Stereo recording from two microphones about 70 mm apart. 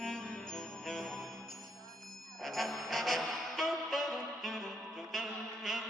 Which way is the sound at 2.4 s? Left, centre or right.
Centre.